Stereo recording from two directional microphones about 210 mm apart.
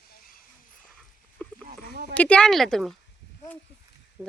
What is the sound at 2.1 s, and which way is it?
Speech, 5° left (ahead or behind).